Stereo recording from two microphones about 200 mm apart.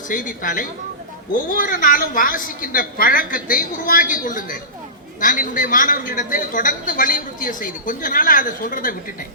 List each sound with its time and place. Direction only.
0.1 s a woman's voice: 40° left (ahead or behind)